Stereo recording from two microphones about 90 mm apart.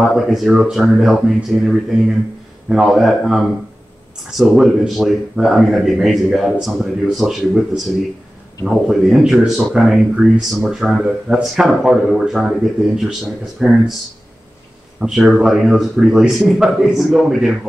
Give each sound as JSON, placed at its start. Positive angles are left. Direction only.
{"t": 0.0, "sound": "speech", "side_deg": 0}
{"t": 15.0, "sound": "speech", "side_deg": -5}